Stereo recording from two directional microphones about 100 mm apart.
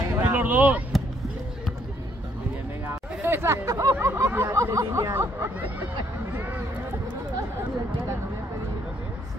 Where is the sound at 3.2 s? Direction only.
25° right (ahead or behind).